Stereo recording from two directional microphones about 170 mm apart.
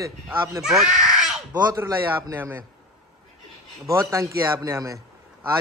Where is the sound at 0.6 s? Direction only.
5° right (ahead or behind).